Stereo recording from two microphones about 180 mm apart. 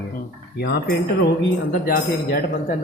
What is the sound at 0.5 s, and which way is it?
Speech, 65° left (ahead or behind).